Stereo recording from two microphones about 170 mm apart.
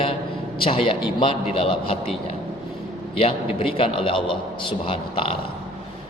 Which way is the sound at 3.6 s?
30° left (ahead or behind).